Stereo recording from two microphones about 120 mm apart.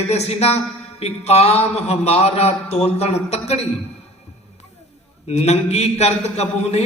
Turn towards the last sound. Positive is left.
turn(degrees=60)  # may be behind; listen again after turning